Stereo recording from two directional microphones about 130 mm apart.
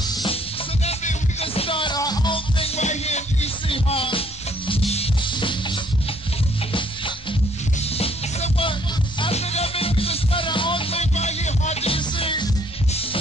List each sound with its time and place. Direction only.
0.8 s music: 50° left (ahead or behind)
3.6 s music: 45° left (ahead or behind)
8.0 s music: 45° left (ahead or behind)